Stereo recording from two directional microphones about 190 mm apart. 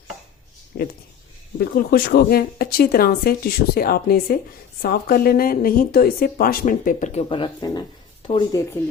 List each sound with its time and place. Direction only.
0.7 s a woman's voice: 55° left (ahead or behind); by 8.6 s 25° left (ahead or behind)